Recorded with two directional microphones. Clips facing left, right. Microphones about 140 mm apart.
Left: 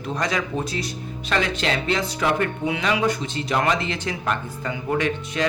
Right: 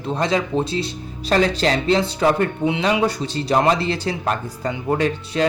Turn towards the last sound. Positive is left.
turn(degrees=-35)  # may be behind; listen again after turning